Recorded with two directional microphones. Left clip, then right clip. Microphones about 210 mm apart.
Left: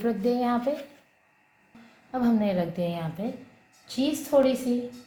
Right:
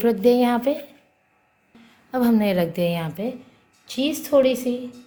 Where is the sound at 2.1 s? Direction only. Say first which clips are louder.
Right 5 dB; 55° right (ahead or behind).